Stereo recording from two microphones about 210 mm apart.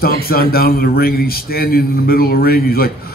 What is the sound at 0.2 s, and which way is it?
A man's voice, 45° left (ahead or behind).